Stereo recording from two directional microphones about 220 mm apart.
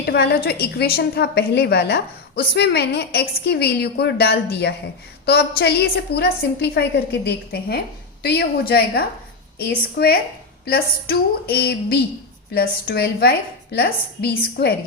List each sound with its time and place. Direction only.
0.0 s a woman's voice: 45° left (ahead or behind)